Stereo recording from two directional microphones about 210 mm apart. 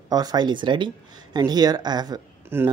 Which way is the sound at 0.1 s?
20° right (ahead or behind).